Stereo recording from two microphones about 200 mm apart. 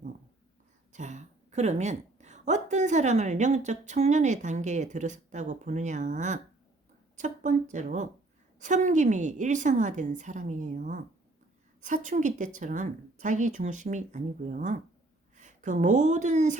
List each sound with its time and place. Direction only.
0.9 s a woman's voice: 35° right (ahead or behind)